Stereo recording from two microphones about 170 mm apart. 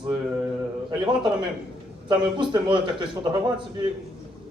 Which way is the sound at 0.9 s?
25° right (ahead or behind).